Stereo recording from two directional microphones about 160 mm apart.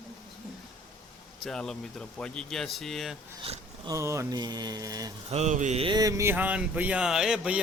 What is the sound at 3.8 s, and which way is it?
Mantra, 20° right (ahead or behind).